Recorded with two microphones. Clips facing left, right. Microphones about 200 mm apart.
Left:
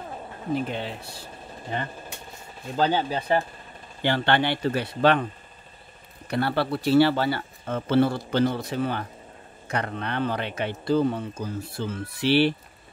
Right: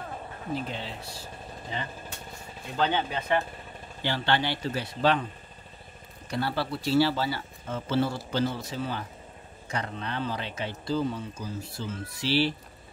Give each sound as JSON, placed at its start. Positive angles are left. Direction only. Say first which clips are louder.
{"t": 0.6, "sound": "speech", "louder": "left 5 dB", "side_deg": 55}
{"t": 2.8, "sound": "speech", "louder": "left 4 dB", "side_deg": 35}
{"t": 4.0, "sound": "speech", "louder": "left 5 dB", "side_deg": 60}
{"t": 6.2, "sound": "speech", "louder": "left 5 dB", "side_deg": 60}